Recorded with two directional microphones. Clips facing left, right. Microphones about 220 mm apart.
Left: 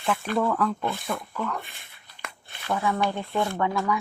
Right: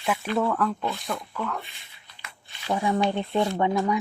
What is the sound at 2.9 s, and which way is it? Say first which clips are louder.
Speech: right 3 dB; 20° right (ahead or behind).